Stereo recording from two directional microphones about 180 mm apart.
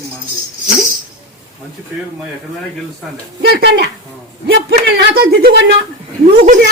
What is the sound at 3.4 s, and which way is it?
A man's voice, 60° right (ahead or behind).